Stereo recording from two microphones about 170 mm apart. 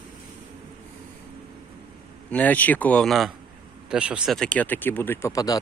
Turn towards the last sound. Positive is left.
turn(degrees=20)  # may be behind; listen again after turning